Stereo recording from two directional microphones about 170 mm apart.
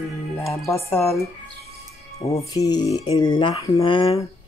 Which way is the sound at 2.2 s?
20° left (ahead or behind).